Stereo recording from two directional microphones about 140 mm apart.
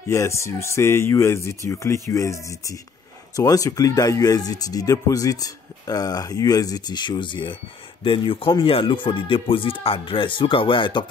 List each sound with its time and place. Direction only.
0.1 s speech: 20° left (ahead or behind); by 11.1 s 35° left (ahead or behind)